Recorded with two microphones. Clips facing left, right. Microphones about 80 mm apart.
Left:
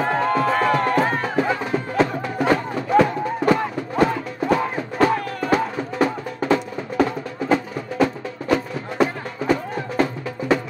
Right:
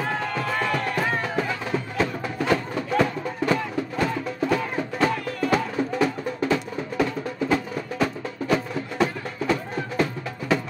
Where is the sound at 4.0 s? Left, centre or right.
Left.